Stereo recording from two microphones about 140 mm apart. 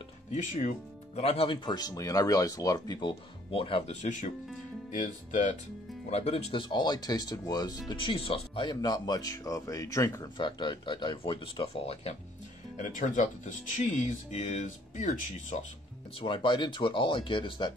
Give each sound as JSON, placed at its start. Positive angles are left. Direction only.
{"t": 0.3, "sound": "speech", "side_deg": 60}
{"t": 1.2, "sound": "speech", "side_deg": 45}
{"t": 4.0, "sound": "speech", "side_deg": 60}
{"t": 6.0, "sound": "speech", "side_deg": 50}
{"t": 12.7, "sound": "speech", "side_deg": 65}
{"t": 16.2, "sound": "speech", "side_deg": 35}